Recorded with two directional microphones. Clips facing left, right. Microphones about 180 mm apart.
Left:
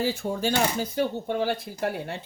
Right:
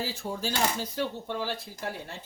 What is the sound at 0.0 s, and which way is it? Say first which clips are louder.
Speech: left 7 dB; 55° left (ahead or behind).